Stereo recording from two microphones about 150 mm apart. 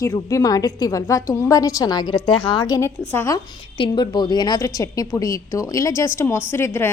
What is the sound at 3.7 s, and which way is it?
A woman's voice, 30° left (ahead or behind).